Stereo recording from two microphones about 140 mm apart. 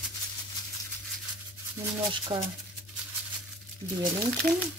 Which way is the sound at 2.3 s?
45° right (ahead or behind).